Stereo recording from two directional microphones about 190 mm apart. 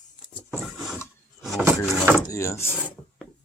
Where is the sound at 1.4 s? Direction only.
Centre (ahead or behind).